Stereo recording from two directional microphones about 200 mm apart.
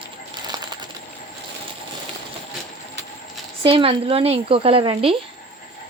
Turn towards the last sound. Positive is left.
turn(degrees=-25)  # may be behind; listen again after turning